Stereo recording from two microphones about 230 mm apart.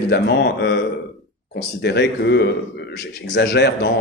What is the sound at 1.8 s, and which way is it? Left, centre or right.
A man's voice, left.